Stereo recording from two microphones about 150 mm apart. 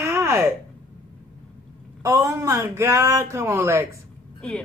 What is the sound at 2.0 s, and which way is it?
Speech, 20° right (ahead or behind).